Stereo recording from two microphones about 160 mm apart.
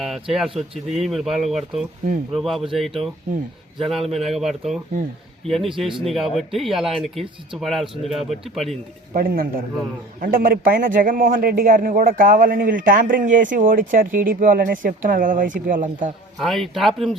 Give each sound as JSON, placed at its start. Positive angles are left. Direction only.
{"t": 0.0, "sound": "speech", "side_deg": 0}
{"t": 9.1, "sound": "a man's voice", "side_deg": -65}
{"t": 16.4, "sound": "speech", "side_deg": 0}